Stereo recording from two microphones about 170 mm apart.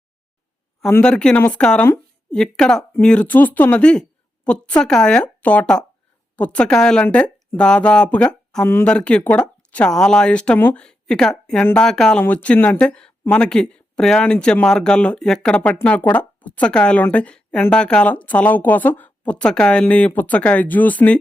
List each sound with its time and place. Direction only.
0.9 s a woman's voice: 10° left (ahead or behind)